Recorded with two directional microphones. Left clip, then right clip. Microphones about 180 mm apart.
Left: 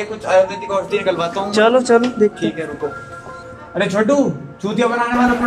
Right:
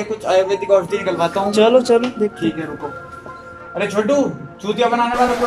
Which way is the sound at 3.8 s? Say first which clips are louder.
Left 1 dB; centre (ahead or behind).